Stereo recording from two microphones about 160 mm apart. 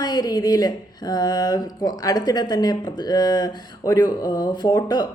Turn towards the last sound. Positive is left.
turn(degrees=25)  # may be behind; listen again after turning